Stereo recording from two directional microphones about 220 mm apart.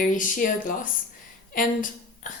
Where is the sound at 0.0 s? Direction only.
40° left (ahead or behind).